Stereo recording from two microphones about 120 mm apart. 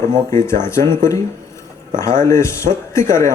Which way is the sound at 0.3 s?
25° left (ahead or behind).